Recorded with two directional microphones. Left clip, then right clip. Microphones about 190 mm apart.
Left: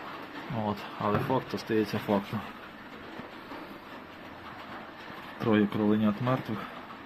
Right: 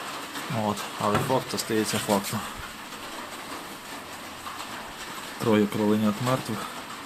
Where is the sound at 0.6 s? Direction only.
5° right (ahead or behind).